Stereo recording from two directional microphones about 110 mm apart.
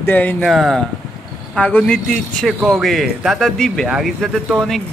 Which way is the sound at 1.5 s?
10° left (ahead or behind).